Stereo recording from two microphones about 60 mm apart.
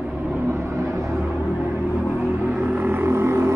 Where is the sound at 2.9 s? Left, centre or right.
Right.